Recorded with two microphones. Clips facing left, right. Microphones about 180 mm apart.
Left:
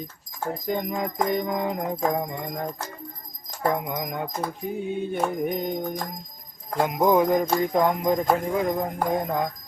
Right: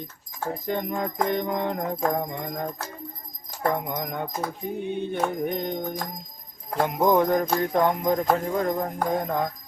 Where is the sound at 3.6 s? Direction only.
5° left (ahead or behind).